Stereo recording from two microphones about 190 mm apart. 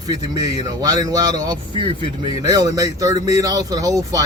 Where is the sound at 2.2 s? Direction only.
20° right (ahead or behind).